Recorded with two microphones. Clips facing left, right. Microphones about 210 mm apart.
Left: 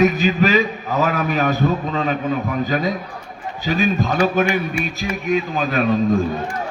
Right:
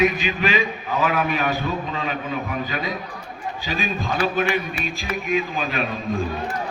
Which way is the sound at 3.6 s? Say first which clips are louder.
Left 8 dB; 45° left (ahead or behind).